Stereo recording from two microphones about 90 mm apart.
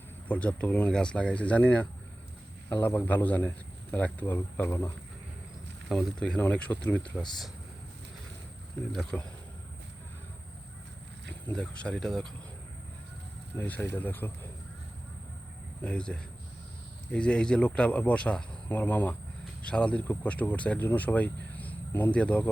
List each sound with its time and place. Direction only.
0.3 s a man's voice: 15° left (ahead or behind)
5.9 s speech: 5° left (ahead or behind)
8.9 s speech: 5° left (ahead or behind)
11.3 s speech: 10° left (ahead or behind)
13.6 s a man's voice: 20° left (ahead or behind)
15.8 s speech: 10° left (ahead or behind)